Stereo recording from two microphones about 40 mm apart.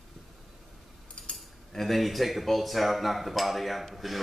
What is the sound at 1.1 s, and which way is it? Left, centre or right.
Cutlery, left.